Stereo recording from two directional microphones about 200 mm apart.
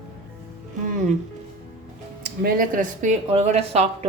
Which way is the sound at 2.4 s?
45° right (ahead or behind).